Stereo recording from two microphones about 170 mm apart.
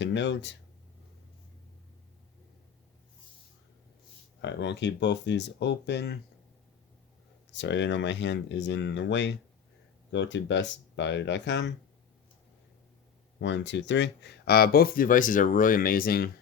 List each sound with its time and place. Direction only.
0.0 s speech: 90° left
4.4 s speech: 90° left
7.5 s speech: 90° left
13.4 s speech: 90° left; by 16.3 s 60° left (ahead or behind)